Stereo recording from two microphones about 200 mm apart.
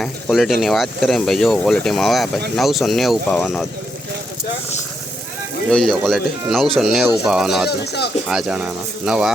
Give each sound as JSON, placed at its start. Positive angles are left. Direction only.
{"t": 0.0, "sound": "speech", "side_deg": 0}
{"t": 5.7, "sound": "speech", "side_deg": 0}
{"t": 7.7, "sound": "speech", "side_deg": 55}
{"t": 8.3, "sound": "speech", "side_deg": -5}